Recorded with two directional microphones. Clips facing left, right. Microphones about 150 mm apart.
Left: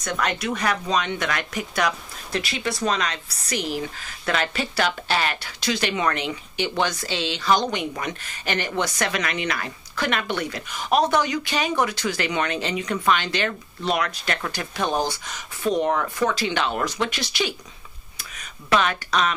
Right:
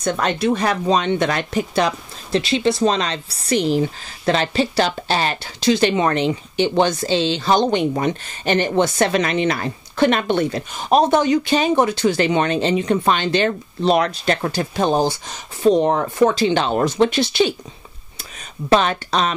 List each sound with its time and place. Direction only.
0.0 s speech: 30° right (ahead or behind)
18.7 s speech: 30° right (ahead or behind)